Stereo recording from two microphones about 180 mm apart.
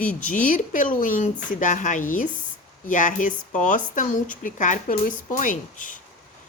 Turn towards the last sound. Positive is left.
turn(degrees=45)  # may be behind; listen again after turning